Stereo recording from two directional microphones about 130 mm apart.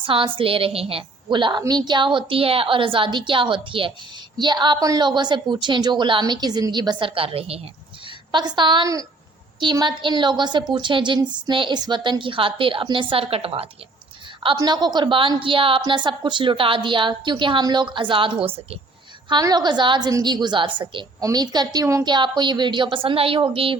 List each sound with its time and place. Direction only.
0.0 s a woman's voice: 40° right (ahead or behind)
8.3 s a woman's voice: 35° right (ahead or behind)
14.4 s a woman's voice: 35° right (ahead or behind)
19.3 s a woman's voice: 30° right (ahead or behind)